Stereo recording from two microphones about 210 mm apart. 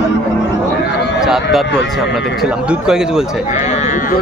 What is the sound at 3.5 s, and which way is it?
Speech, 35° left (ahead or behind).